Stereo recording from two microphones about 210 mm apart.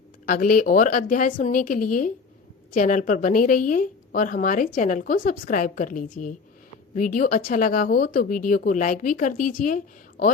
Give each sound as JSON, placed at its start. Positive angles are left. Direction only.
{"t": 0.3, "sound": "a woman's voice", "side_deg": 40}